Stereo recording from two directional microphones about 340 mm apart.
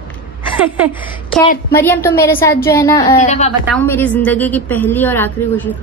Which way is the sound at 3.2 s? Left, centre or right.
Centre.